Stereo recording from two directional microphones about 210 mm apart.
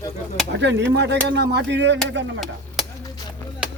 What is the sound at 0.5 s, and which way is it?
Speech, 60° right (ahead or behind).